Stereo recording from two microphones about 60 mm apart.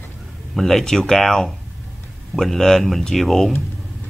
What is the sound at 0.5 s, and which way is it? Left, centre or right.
Speech, centre.